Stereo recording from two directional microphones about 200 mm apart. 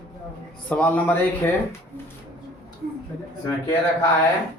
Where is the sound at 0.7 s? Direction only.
5° left (ahead or behind).